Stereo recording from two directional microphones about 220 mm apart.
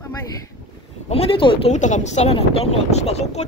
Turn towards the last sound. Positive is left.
turn(degrees=30)  # may be behind; listen again after turning